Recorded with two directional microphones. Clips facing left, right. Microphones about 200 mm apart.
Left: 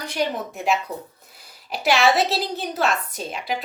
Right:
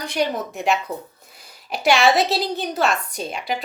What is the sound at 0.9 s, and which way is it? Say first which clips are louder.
Speech: right 2 dB; 25° right (ahead or behind).